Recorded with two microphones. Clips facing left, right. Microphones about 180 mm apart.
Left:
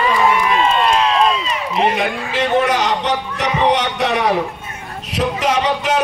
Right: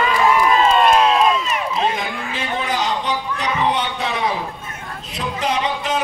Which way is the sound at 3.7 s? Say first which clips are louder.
Left 5 dB; 70° left (ahead or behind).